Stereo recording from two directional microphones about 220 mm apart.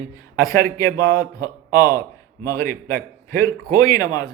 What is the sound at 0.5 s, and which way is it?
Speech, 15° left (ahead or behind).